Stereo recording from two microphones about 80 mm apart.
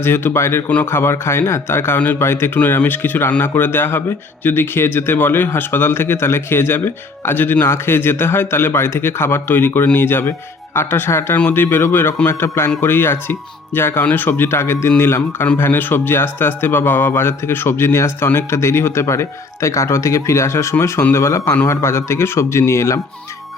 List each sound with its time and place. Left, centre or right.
0.0 s speech: left